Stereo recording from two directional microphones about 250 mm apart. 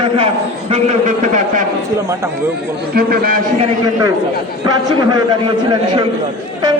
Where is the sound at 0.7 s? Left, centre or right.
Right.